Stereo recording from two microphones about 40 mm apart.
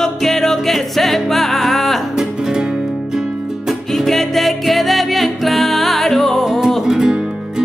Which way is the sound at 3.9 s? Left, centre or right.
Centre.